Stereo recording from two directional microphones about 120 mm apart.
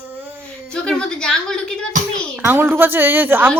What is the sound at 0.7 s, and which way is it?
A woman's voice, 5° left (ahead or behind).